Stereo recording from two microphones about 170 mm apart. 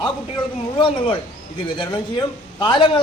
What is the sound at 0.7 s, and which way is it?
A man's voice, 30° left (ahead or behind).